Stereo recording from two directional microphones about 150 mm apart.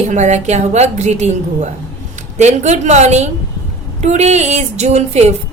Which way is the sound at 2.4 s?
50° right (ahead or behind).